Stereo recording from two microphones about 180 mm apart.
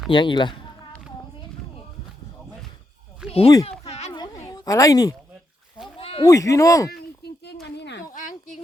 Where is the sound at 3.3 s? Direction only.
35° left (ahead or behind).